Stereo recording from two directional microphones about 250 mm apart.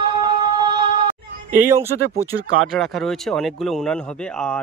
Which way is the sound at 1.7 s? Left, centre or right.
Centre.